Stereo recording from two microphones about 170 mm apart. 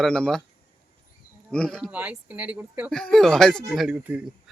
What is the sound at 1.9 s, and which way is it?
Speech, 10° right (ahead or behind).